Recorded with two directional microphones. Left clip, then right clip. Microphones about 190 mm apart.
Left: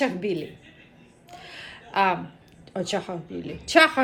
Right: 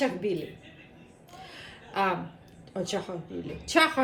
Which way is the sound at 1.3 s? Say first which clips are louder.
Left 5 dB; 5° right (ahead or behind).